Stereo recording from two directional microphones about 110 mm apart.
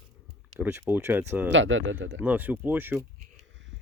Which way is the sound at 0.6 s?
20° right (ahead or behind).